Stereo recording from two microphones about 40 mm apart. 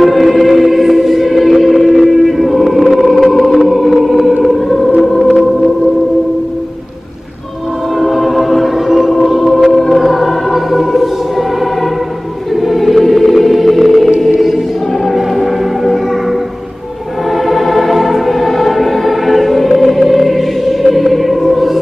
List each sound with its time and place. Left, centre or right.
0.0 s music: centre
8.0 s music: centre
12.6 s music: centre